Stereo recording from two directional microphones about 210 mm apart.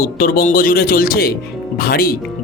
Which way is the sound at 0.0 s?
45° left (ahead or behind).